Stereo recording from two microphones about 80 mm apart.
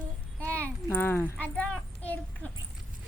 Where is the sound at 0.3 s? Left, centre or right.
Centre.